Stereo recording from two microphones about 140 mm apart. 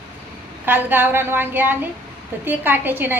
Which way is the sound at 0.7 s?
15° right (ahead or behind).